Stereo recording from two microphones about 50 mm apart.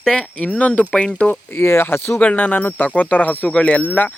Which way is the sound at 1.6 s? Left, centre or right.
Left.